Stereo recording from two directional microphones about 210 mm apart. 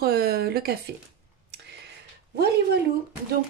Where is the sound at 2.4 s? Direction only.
50° right (ahead or behind).